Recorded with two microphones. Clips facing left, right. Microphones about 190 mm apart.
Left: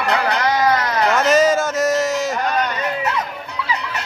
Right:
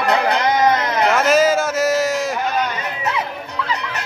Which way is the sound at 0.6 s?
20° right (ahead or behind).